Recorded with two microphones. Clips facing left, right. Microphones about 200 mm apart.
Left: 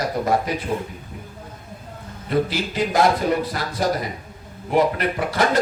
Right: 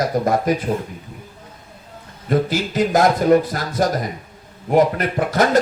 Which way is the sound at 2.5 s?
45° right (ahead or behind).